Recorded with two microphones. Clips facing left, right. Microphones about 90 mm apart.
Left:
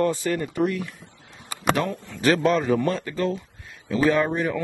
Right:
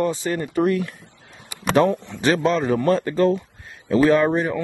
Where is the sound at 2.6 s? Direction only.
40° right (ahead or behind).